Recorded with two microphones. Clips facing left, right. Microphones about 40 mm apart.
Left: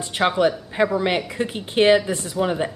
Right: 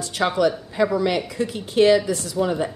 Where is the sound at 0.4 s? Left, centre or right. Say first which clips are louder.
Right 2 dB; left.